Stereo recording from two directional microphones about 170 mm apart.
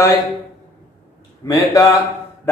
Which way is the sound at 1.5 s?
20° left (ahead or behind).